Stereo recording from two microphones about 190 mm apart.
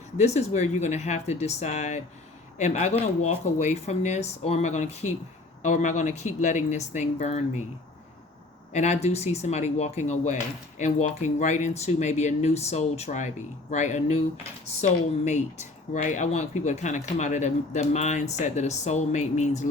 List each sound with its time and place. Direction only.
0.2 s speech: 35° left (ahead or behind)
8.7 s speech: 35° left (ahead or behind)